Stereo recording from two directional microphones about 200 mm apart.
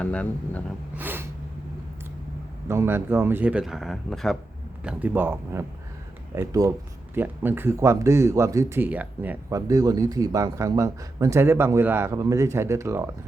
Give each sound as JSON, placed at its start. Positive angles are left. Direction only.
{"t": 0.0, "sound": "speech", "side_deg": 5}
{"t": 0.9, "sound": "a sound", "side_deg": -10}
{"t": 2.6, "sound": "speech", "side_deg": -10}